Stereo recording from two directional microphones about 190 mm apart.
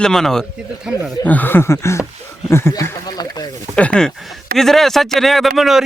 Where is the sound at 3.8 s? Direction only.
5° left (ahead or behind).